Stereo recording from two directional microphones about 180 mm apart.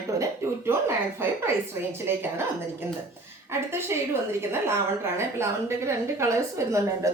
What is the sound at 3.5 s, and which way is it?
A woman's voice, 15° right (ahead or behind).